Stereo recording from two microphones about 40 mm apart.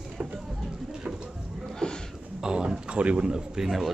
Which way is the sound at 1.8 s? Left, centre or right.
Left.